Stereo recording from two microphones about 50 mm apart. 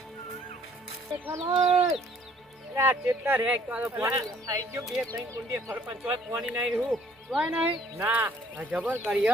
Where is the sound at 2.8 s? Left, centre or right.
Right.